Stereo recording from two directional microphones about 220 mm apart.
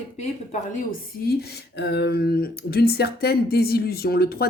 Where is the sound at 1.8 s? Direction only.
50° left (ahead or behind).